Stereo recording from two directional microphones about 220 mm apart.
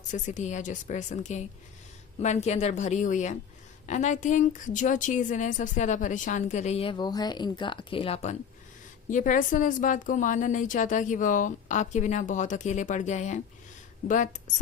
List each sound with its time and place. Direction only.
0.1 s a woman's voice: 35° left (ahead or behind)